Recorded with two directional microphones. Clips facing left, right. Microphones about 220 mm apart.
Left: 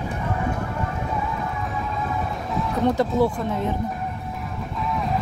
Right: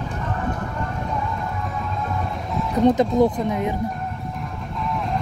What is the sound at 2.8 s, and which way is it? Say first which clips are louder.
Speech: right 4 dB; 20° right (ahead or behind).